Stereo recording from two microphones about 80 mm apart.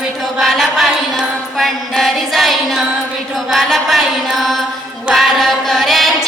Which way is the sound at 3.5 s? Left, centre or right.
Centre.